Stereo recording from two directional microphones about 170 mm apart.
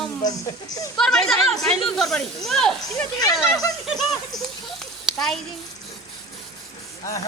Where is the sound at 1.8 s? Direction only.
Centre (ahead or behind).